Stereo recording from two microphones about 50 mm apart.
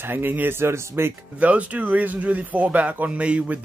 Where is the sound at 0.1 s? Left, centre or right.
Right.